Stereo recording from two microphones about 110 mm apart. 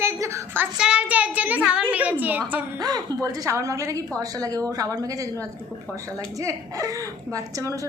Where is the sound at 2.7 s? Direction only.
35° right (ahead or behind).